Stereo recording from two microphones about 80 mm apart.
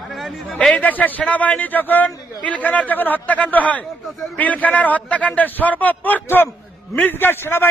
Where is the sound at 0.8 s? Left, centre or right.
Left.